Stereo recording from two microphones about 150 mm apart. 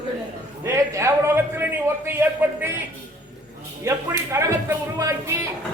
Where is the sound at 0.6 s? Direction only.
20° right (ahead or behind).